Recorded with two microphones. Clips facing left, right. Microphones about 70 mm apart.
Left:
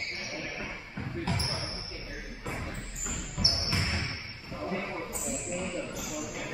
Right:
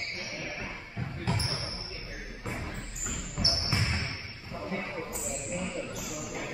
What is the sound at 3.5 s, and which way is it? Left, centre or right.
Basketball bounce, right.